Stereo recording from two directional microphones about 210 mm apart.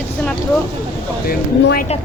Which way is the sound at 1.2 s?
45° left (ahead or behind).